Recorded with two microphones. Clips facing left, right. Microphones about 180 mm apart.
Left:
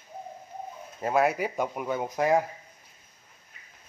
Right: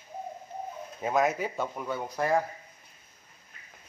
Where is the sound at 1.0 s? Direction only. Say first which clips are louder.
Left 2 dB; 5° left (ahead or behind).